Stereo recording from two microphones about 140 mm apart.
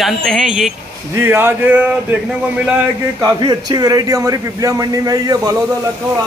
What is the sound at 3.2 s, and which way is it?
A man's voice, 30° right (ahead or behind).